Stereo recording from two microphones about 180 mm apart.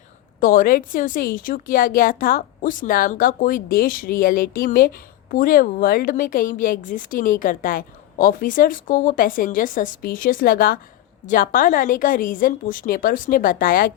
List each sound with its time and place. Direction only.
0.3 s a woman's voice: 50° left (ahead or behind)